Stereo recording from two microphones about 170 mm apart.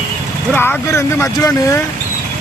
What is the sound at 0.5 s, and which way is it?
Speech, 10° left (ahead or behind).